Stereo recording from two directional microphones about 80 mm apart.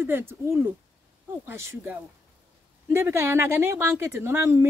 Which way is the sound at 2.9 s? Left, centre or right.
Right.